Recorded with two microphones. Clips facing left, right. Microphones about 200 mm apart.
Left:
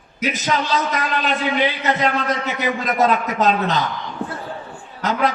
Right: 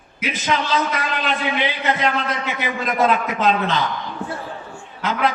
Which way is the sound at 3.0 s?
40° left (ahead or behind).